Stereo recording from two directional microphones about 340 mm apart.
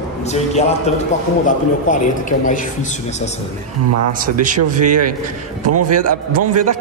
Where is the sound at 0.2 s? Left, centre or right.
Centre.